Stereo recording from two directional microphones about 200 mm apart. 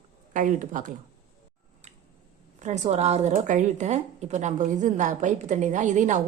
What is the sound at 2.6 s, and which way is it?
Speech, 35° right (ahead or behind).